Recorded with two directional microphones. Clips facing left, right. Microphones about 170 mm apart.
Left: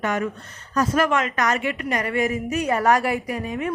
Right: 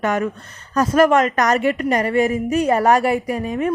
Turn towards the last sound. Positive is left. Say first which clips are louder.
# right 5 dB
turn(degrees=-35)  # may be behind; listen again after turning